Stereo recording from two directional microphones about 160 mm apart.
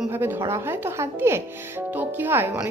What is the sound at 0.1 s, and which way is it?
Speech, 15° right (ahead or behind).